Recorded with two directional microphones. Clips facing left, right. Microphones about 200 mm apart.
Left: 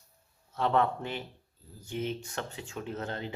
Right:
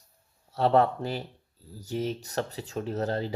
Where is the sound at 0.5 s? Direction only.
35° right (ahead or behind).